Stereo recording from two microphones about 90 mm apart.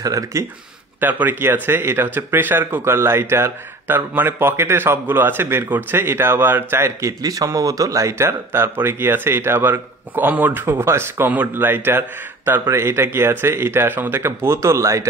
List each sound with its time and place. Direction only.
0.0 s speech: 35° right (ahead or behind)
1.0 s speech: 20° right (ahead or behind)